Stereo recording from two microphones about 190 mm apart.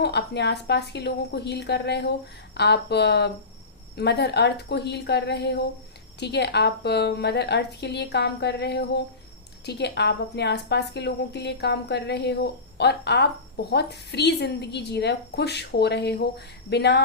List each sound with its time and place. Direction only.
0.0 s a woman's voice: 60° left (ahead or behind)